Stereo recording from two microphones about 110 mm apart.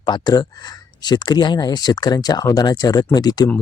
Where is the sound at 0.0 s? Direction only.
40° left (ahead or behind).